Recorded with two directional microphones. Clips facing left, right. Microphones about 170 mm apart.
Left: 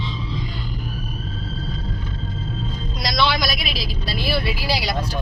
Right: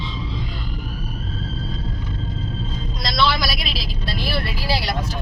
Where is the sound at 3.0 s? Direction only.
Centre (ahead or behind).